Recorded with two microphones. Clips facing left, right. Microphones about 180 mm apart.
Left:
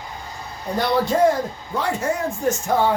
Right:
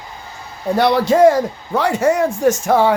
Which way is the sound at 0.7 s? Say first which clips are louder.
Right 6 dB; 80° right.